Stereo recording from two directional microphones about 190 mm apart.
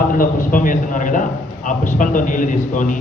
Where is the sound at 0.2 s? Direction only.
45° left (ahead or behind).